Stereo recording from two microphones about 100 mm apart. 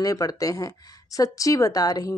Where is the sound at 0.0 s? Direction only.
35° left (ahead or behind).